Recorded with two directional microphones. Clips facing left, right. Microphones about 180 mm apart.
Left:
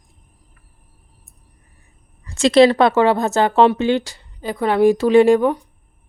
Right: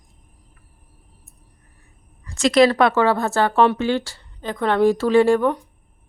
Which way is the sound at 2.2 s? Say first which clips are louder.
Left 3 dB; 30° left (ahead or behind).